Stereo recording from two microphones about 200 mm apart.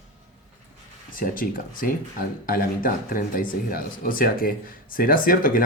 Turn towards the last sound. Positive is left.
turn(degrees=45)  # may be behind; listen again after turning